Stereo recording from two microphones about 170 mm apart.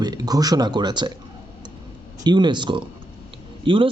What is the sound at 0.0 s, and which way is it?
A man's voice, 20° right (ahead or behind).